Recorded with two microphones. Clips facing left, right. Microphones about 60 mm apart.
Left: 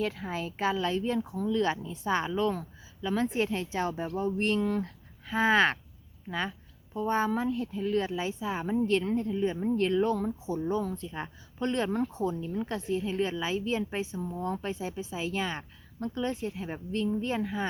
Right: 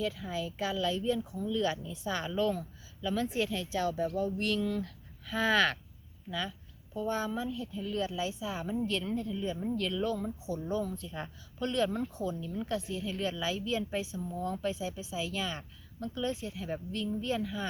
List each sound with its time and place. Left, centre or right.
0.0 s speech: left